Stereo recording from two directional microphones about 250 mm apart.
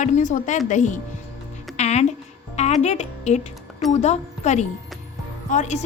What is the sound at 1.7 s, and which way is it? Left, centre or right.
Music, left.